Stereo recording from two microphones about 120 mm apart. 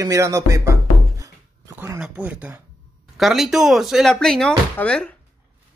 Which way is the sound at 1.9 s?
10° right (ahead or behind).